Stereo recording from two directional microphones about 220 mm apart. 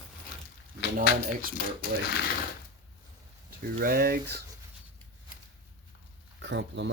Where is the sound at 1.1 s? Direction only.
45° left (ahead or behind).